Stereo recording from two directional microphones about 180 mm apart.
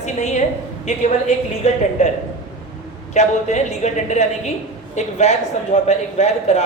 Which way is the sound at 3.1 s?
40° left (ahead or behind).